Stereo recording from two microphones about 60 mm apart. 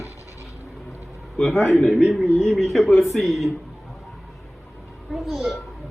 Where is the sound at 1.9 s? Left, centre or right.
Centre.